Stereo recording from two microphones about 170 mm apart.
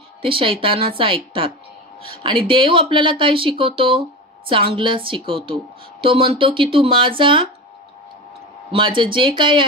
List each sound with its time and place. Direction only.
0.2 s speech: 30° right (ahead or behind)
8.7 s speech: 30° right (ahead or behind)